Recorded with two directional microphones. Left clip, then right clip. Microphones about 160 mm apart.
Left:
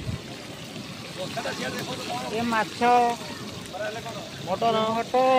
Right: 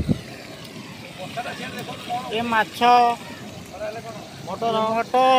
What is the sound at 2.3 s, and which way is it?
Speech, 15° right (ahead or behind).